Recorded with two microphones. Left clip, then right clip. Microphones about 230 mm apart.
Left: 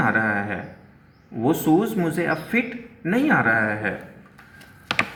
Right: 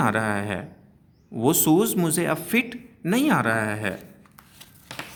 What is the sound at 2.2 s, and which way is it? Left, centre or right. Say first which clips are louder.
Speech: left 1 dB; right.